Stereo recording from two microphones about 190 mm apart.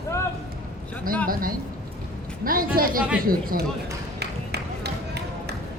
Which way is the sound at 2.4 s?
50° right (ahead or behind).